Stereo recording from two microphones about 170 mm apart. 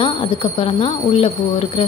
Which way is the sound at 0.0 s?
30° left (ahead or behind).